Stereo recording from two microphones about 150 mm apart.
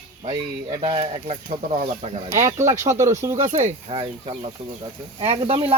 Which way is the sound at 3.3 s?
50° right (ahead or behind).